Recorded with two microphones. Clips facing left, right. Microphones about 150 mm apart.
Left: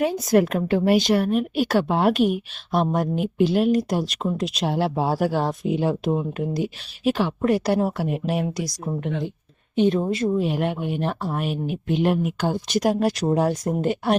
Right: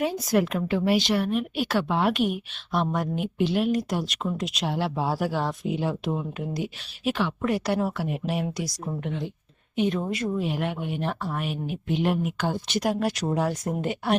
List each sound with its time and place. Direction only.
0.0 s a woman's voice: 50° left (ahead or behind)